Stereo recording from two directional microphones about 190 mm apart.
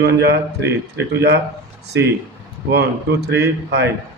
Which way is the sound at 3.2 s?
60° right (ahead or behind).